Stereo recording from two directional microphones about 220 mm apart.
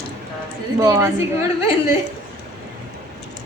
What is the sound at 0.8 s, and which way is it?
Speech, 15° right (ahead or behind).